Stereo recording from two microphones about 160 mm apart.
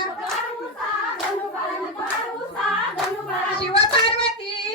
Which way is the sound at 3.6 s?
35° left (ahead or behind).